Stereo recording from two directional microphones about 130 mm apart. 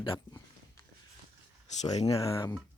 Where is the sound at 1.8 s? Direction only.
60° left (ahead or behind).